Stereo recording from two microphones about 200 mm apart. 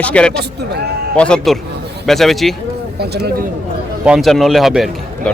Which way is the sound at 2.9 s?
55° right (ahead or behind).